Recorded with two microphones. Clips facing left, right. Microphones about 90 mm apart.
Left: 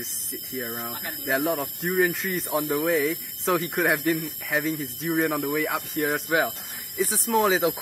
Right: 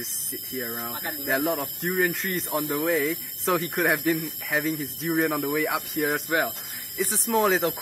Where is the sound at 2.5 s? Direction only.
15° left (ahead or behind).